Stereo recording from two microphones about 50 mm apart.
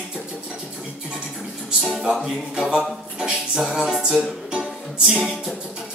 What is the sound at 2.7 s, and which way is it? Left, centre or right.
Music, centre.